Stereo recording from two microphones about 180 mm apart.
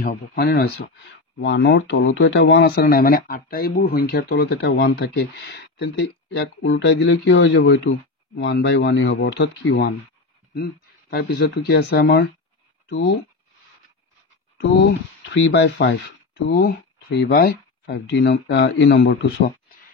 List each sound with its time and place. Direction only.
0.0 s speech: 55° left (ahead or behind)
1.4 s speech: 85° left
10.5 s speech: 60° left (ahead or behind)
14.6 s speech: 60° left (ahead or behind)